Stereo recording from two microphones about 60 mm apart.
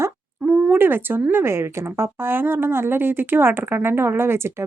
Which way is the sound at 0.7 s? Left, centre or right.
Right.